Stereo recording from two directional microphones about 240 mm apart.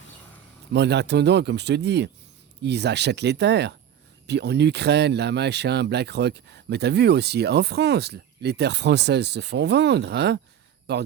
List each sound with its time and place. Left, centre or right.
0.7 s speech: right